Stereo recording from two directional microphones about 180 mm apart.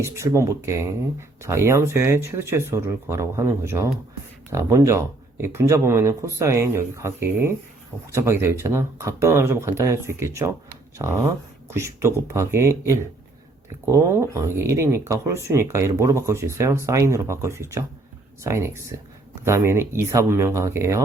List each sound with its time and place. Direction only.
0.0 s speech: 15° right (ahead or behind)